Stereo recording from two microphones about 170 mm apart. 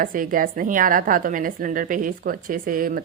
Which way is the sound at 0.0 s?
55° right (ahead or behind).